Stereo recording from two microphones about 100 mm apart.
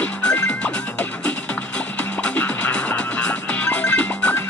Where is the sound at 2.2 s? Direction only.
15° left (ahead or behind).